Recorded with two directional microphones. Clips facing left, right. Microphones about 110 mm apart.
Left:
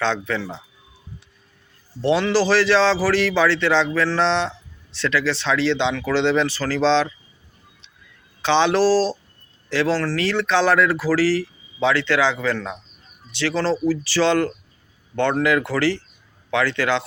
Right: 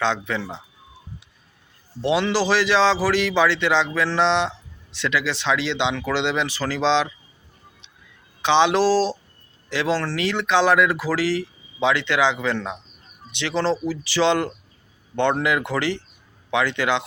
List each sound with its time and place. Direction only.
0.0 s a man's voice: 15° right (ahead or behind)
2.0 s a man's voice: 15° right (ahead or behind)
8.4 s a man's voice: 15° right (ahead or behind)